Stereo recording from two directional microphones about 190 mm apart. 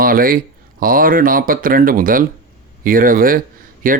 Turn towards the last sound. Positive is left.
turn(degrees=-45)  # may be behind; listen again after turning